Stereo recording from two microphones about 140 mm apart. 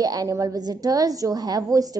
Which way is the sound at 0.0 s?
25° right (ahead or behind).